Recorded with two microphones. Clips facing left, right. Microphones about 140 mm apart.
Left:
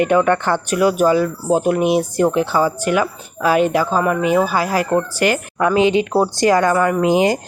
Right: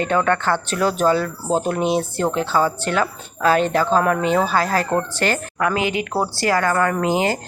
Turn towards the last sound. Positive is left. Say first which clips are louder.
# left 5 dB
turn(degrees=15)  # may be behind; listen again after turning